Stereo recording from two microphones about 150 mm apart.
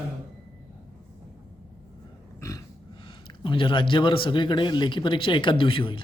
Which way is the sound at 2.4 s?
20° left (ahead or behind).